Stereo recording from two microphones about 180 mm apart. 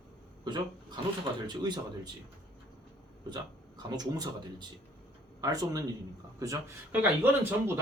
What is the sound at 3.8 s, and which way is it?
Speech, 20° right (ahead or behind).